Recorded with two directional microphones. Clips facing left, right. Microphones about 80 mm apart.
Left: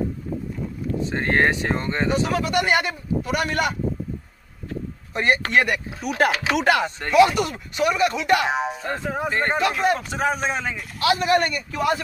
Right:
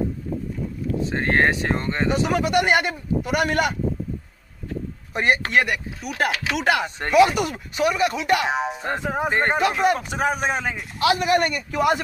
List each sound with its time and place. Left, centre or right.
1.0 s speech: centre
2.0 s a man's voice: centre
5.1 s a man's voice: centre
6.6 s speech: centre
8.7 s a man's voice: centre